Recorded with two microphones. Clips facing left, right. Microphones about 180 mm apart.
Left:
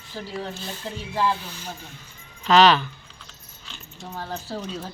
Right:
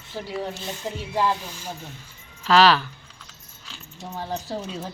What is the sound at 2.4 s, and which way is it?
Speech, centre (ahead or behind).